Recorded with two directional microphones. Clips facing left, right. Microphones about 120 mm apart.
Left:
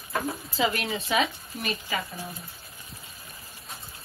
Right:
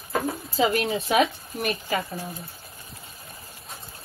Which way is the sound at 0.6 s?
35° right (ahead or behind).